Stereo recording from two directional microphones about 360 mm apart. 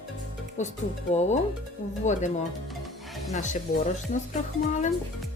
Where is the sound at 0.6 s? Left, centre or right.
Centre.